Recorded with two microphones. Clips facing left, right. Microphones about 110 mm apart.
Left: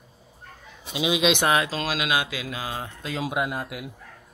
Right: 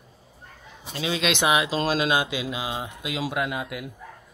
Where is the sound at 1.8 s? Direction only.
35° right (ahead or behind); by 3.2 s 15° right (ahead or behind).